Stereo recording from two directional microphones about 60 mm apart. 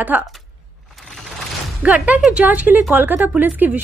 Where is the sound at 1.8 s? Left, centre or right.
Right.